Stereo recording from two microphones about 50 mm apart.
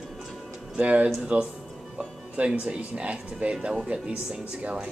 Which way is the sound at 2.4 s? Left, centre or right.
Right.